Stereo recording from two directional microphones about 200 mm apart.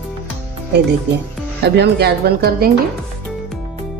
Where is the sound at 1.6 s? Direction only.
55° right (ahead or behind).